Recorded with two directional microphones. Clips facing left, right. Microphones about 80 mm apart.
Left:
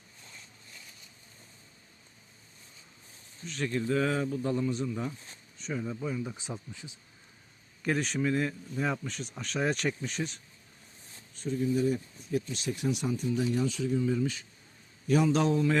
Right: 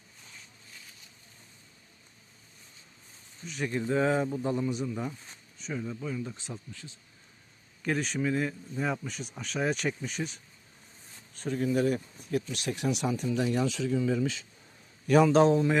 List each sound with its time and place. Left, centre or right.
3.4 s speech: centre
3.7 s speech: right
5.5 s a sound: centre
5.8 s speech: centre
7.8 s speech: centre
11.3 s speech: right
15.0 s a man's voice: right
15.4 s speech: right